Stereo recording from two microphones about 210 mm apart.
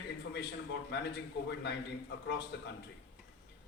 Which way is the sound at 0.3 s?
55° left (ahead or behind).